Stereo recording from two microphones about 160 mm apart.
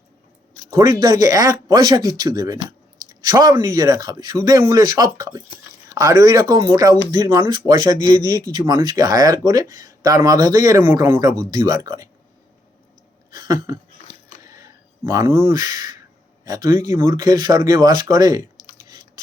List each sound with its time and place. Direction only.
0.7 s speech: 20° right (ahead or behind)
13.3 s a sound: 25° right (ahead or behind)
16.4 s a man's voice: 25° right (ahead or behind)